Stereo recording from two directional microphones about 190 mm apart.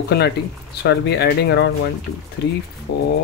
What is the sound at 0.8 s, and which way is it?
Speech, 60° left (ahead or behind).